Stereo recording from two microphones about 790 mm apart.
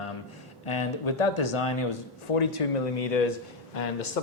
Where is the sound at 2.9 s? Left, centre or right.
Left.